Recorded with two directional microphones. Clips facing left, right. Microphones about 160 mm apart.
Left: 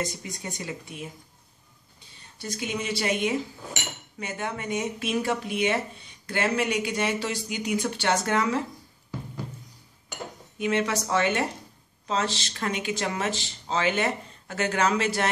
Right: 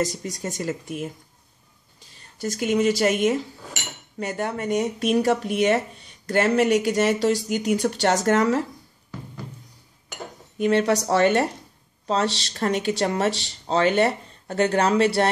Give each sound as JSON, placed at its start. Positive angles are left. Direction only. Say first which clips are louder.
{"t": 0.0, "sound": "speech", "louder": "right 6 dB", "side_deg": -40}
{"t": 2.4, "sound": "speech", "louder": "right 10 dB", "side_deg": -45}
{"t": 10.6, "sound": "speech", "louder": "right 6 dB", "side_deg": -40}